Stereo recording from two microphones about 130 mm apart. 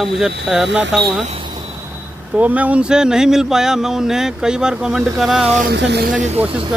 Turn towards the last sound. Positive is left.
turn(degrees=-85)